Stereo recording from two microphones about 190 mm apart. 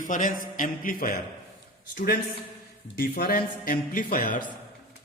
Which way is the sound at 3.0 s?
50° left (ahead or behind).